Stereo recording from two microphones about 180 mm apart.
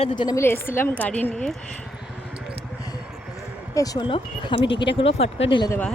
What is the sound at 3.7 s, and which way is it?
Speech, 20° left (ahead or behind).